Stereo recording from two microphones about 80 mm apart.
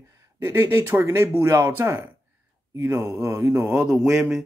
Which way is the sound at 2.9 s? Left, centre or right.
Right.